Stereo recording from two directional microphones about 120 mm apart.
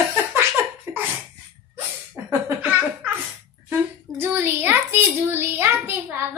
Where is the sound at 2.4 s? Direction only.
15° right (ahead or behind).